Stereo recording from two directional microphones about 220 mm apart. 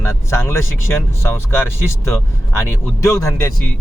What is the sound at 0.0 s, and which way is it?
Speech, 10° left (ahead or behind).